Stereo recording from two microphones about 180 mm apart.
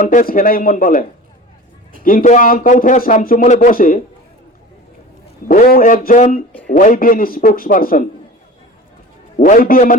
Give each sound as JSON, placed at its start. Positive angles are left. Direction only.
{"t": 0.1, "sound": "speech", "side_deg": 50}
{"t": 2.0, "sound": "speech", "side_deg": 45}
{"t": 5.5, "sound": "speech", "side_deg": 50}
{"t": 9.4, "sound": "speech", "side_deg": 50}